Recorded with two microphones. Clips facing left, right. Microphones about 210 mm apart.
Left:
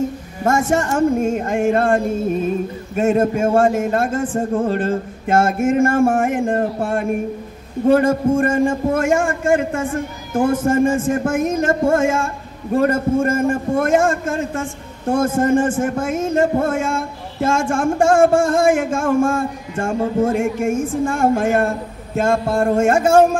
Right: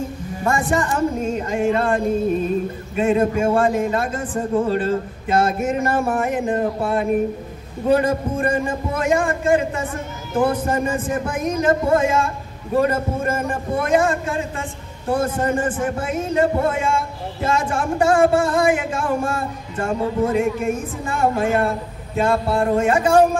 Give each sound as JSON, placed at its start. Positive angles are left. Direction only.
{"t": 0.4, "sound": "a man's voice", "side_deg": 45}
{"t": 3.0, "sound": "a man's voice", "side_deg": 45}